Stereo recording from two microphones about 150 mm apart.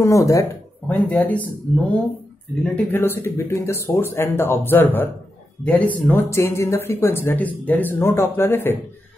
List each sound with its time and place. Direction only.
0.0 s speech: 20° left (ahead or behind)
2.6 s speech: 10° left (ahead or behind)